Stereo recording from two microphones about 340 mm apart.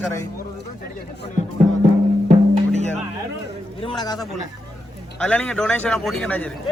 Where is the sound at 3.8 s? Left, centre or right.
Centre.